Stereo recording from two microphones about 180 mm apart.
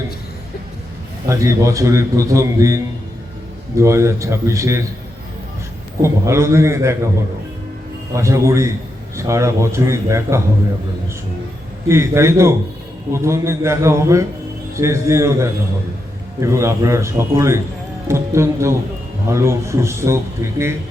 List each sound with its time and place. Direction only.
1.3 s a man's voice: 15° right (ahead or behind)
6.0 s a man's voice: 15° right (ahead or behind)
8.1 s a man's voice: 15° right (ahead or behind)
11.9 s a man's voice: 15° right (ahead or behind)